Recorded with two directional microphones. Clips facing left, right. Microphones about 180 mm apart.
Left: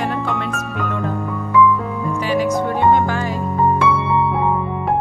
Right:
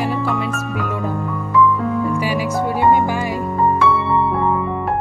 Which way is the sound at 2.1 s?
10° right (ahead or behind).